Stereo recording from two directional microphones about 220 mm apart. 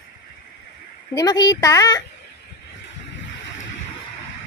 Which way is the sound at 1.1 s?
15° left (ahead or behind).